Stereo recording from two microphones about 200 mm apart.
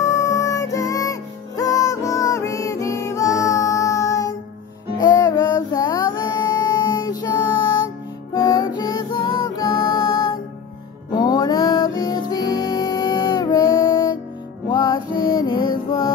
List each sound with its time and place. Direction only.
0.0 s music: 15° left (ahead or behind)
8.4 s music: 20° left (ahead or behind)